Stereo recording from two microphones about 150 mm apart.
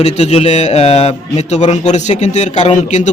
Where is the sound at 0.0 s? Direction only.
45° left (ahead or behind).